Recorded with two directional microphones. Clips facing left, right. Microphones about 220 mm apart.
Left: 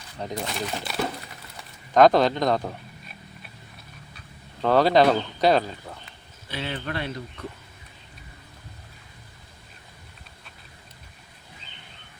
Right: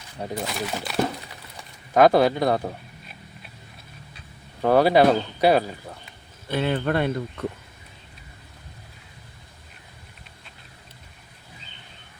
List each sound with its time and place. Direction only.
0.2 s speech: 5° right (ahead or behind)
4.6 s speech: 10° right (ahead or behind)
6.5 s speech: 55° right (ahead or behind)